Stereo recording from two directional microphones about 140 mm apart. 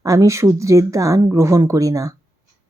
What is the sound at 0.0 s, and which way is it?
Speech, 25° right (ahead or behind).